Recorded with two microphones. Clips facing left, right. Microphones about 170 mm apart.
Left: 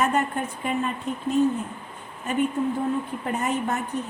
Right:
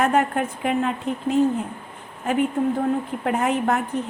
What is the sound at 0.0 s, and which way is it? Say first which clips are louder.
Speech: right 4 dB; 60° right (ahead or behind).